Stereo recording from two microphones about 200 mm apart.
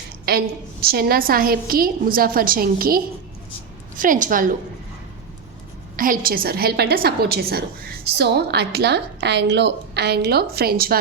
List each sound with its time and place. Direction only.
0.3 s a woman's voice: 50° right (ahead or behind)
6.0 s a woman's voice: 45° right (ahead or behind)